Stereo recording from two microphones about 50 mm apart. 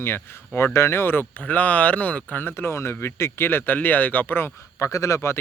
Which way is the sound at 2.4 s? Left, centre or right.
Left.